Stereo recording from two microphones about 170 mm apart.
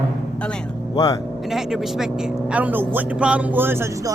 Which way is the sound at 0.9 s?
20° left (ahead or behind).